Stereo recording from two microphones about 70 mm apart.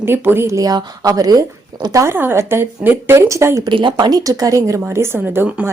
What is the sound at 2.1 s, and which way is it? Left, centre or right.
A woman's voice, right.